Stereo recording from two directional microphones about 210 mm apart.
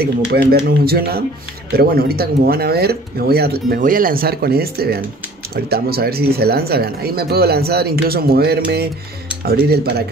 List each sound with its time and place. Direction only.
0.0 s speech: 45° right (ahead or behind)